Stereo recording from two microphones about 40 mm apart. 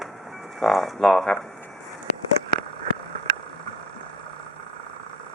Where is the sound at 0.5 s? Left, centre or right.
Centre.